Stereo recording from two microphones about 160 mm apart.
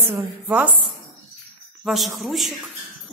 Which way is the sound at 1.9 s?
Centre (ahead or behind).